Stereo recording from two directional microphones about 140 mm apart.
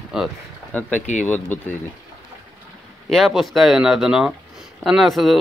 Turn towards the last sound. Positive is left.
turn(degrees=0)  # may be behind; listen again after turning